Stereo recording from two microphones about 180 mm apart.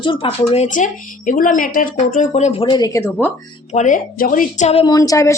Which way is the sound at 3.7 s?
45° left (ahead or behind).